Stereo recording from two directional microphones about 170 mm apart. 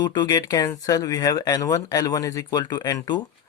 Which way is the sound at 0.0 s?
25° left (ahead or behind).